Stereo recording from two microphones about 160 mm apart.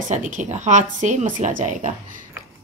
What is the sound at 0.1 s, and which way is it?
A woman's voice, 50° right (ahead or behind).